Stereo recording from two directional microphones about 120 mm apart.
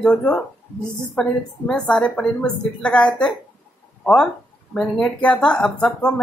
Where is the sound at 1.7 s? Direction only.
10° left (ahead or behind).